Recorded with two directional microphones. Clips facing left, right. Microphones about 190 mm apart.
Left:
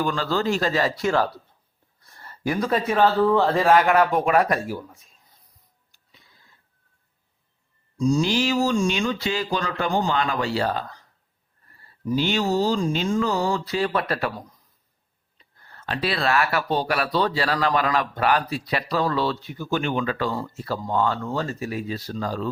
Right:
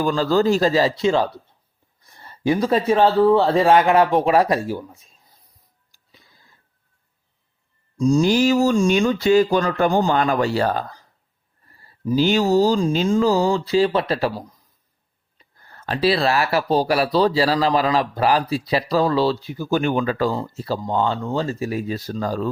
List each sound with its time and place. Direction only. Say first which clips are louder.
0.0 s speech: right 6 dB; 35° right (ahead or behind)
7.9 s speech: right 5 dB; 45° right (ahead or behind)
12.1 s speech: right 6 dB; 40° right (ahead or behind)
15.9 s speech: right 5 dB; 35° right (ahead or behind)
20.3 s speech: right 3 dB; 25° right (ahead or behind); by 22.4 s 45° right (ahead or behind)